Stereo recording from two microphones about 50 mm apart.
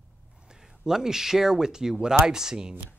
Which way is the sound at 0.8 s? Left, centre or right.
Centre.